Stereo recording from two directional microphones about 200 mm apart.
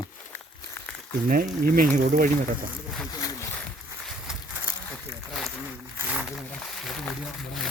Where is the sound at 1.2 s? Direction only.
45° right (ahead or behind).